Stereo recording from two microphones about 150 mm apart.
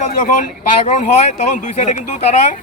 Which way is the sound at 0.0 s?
55° left (ahead or behind).